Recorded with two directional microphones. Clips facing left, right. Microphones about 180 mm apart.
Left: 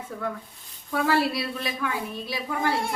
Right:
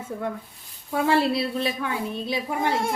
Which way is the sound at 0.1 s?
25° right (ahead or behind).